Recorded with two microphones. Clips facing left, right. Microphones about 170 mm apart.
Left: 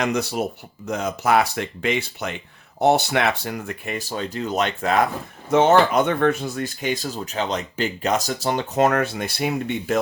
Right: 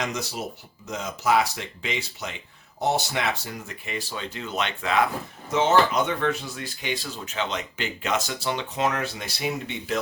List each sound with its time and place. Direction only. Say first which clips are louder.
0.0 s speech: left 7 dB; 60° left (ahead or behind)
5.5 s speech: left 5 dB; 55° left (ahead or behind)